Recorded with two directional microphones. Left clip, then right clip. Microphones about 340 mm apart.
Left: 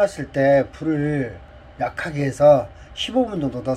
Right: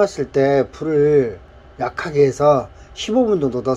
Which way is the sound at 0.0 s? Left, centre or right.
Centre.